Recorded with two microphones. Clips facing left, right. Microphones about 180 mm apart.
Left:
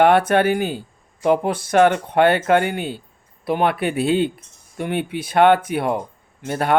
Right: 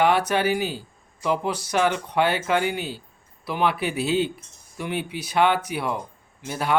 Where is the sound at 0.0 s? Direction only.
55° left (ahead or behind).